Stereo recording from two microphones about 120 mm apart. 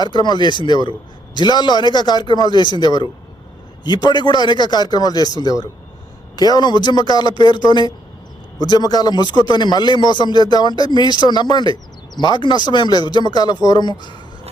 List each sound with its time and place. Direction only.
0.0 s a man's voice: 35° left (ahead or behind)